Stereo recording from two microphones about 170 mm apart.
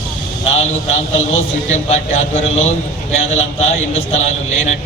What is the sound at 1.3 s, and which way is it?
A man's voice, 40° left (ahead or behind).